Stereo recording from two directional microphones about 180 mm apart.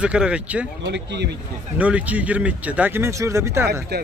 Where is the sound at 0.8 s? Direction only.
75° right (ahead or behind).